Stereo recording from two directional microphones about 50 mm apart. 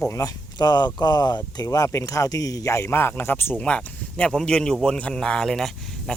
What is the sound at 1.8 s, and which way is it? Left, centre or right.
Speech, left.